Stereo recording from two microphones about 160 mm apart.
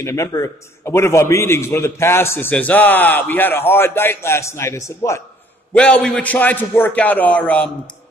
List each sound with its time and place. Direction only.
0.0 s a man's voice: 20° left (ahead or behind)